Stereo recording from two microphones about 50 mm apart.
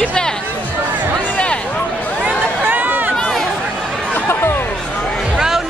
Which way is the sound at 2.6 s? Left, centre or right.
Right.